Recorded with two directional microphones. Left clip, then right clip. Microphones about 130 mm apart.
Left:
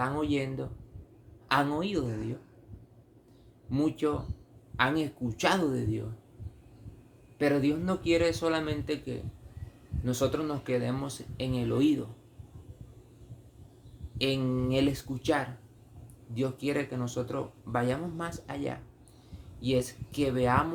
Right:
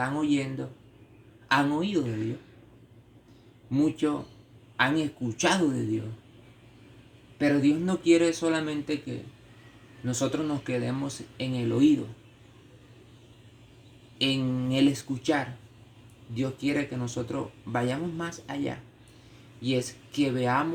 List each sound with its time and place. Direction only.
0.0 s speech: 20° left (ahead or behind)
1.5 s speech: 20° left (ahead or behind)
3.7 s speech: 20° left (ahead or behind)
7.3 s speech: 25° left (ahead or behind)
14.2 s speech: 20° left (ahead or behind)